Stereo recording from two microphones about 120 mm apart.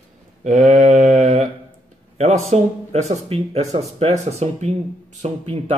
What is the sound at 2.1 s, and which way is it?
Speech, 65° right (ahead or behind).